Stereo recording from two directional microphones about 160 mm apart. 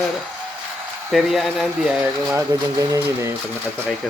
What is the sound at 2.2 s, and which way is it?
Speech, 15° right (ahead or behind).